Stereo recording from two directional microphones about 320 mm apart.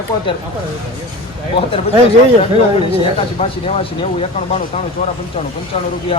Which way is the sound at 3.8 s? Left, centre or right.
Centre.